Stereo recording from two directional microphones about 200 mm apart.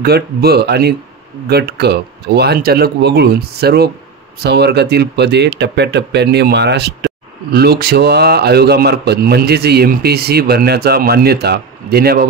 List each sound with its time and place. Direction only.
0.0 s a man's voice: 50° right (ahead or behind)